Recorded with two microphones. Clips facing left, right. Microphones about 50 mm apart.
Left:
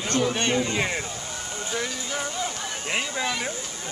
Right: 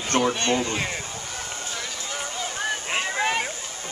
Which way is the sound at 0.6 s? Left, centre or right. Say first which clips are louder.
Left 2 dB; left.